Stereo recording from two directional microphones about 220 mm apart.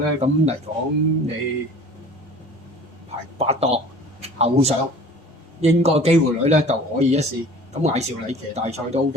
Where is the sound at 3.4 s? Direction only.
30° right (ahead or behind).